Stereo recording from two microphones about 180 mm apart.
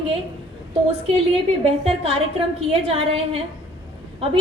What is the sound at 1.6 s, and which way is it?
Speech, 30° right (ahead or behind).